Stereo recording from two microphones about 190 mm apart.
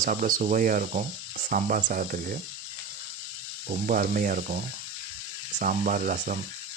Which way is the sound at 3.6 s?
45° right (ahead or behind).